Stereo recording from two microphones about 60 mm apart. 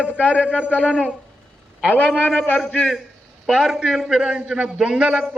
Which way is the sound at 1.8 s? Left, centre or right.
Left.